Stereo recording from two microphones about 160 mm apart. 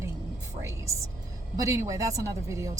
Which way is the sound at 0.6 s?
20° right (ahead or behind).